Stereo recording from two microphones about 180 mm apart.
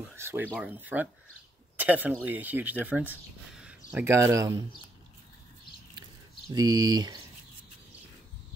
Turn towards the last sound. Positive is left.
turn(degrees=-20)  # may be behind; listen again after turning